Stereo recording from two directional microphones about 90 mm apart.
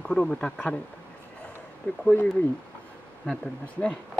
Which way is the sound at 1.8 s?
20° left (ahead or behind).